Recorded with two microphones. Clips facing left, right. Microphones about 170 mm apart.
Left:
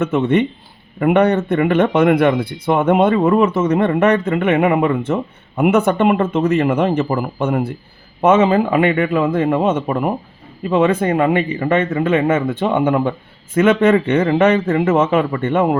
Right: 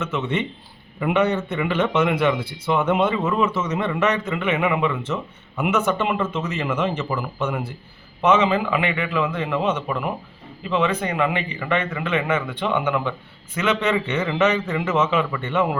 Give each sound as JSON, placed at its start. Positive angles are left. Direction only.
{"t": 0.0, "sound": "speech", "side_deg": 55}